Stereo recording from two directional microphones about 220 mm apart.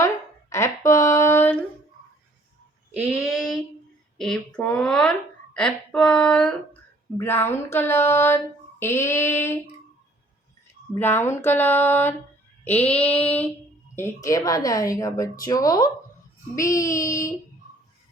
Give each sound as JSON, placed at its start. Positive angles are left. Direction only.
{"t": 0.5, "sound": "a sound", "side_deg": 15}
{"t": 2.9, "sound": "child singing", "side_deg": -5}
{"t": 4.2, "sound": "a woman's voice", "side_deg": 5}
{"t": 10.9, "sound": "a woman's voice", "side_deg": 10}